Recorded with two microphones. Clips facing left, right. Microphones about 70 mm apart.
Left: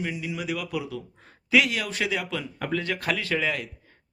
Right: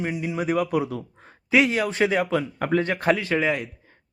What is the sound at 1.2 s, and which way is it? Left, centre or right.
A man's voice, right.